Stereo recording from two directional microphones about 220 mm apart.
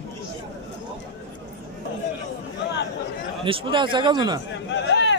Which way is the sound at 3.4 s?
25° right (ahead or behind).